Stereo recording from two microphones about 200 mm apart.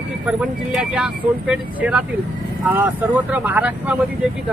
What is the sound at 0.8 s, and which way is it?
Speech, 5° right (ahead or behind).